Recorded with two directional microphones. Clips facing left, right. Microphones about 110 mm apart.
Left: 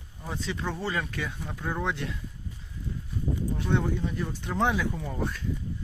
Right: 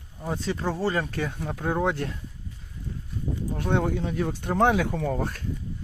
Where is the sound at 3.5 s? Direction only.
55° right (ahead or behind).